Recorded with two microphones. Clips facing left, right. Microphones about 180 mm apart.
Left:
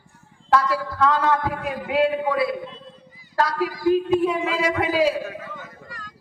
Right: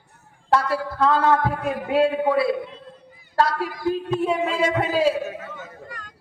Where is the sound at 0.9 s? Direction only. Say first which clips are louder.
Right 2 dB; 30° right (ahead or behind).